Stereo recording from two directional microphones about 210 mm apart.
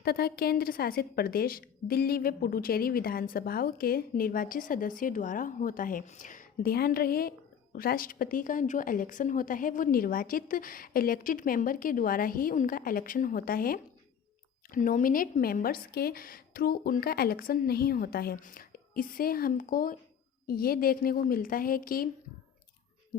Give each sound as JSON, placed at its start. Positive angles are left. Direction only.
{"t": 0.0, "sound": "a woman's voice", "side_deg": 50}